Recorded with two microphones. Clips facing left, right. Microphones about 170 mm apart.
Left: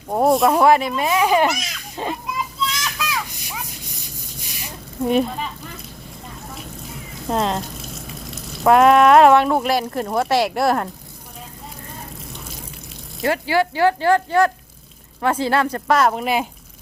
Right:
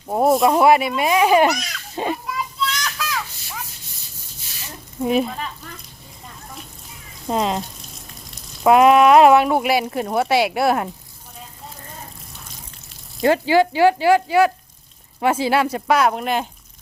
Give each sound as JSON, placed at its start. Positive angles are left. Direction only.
{"t": 0.1, "sound": "speech", "side_deg": 0}
{"t": 2.8, "sound": "a sound", "side_deg": 10}
{"t": 5.0, "sound": "speech", "side_deg": 0}
{"t": 7.3, "sound": "speech", "side_deg": -5}
{"t": 8.0, "sound": "frying", "side_deg": 0}
{"t": 13.2, "sound": "speech", "side_deg": -20}